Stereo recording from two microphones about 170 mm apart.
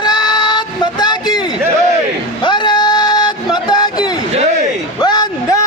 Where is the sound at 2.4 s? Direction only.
25° left (ahead or behind).